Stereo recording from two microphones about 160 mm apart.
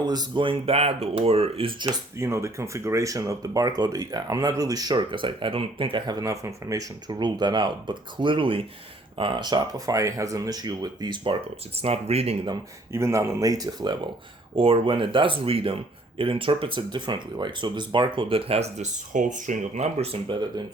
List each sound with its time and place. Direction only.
0.0 s speech: 25° right (ahead or behind)
2.1 s speech: 15° right (ahead or behind); by 12.5 s 40° right (ahead or behind)
12.9 s speech: 15° right (ahead or behind); by 18.6 s 35° right (ahead or behind)
18.8 s speech: 50° right (ahead or behind)